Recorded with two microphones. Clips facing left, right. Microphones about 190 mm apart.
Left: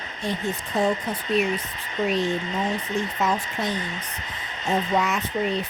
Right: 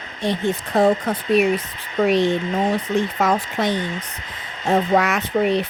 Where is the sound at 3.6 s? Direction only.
90° right.